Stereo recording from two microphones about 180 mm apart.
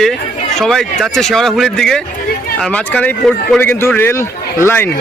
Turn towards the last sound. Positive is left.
turn(degrees=10)  # may be behind; listen again after turning